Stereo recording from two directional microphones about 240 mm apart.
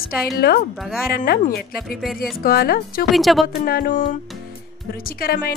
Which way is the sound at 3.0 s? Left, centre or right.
Centre.